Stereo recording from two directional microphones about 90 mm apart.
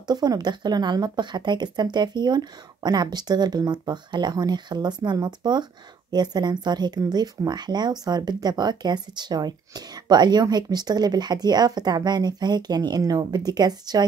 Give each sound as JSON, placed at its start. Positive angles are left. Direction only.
{"t": 0.0, "sound": "speech", "side_deg": -50}